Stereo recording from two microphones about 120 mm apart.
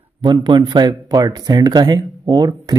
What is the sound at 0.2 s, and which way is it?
Speech, 40° right (ahead or behind).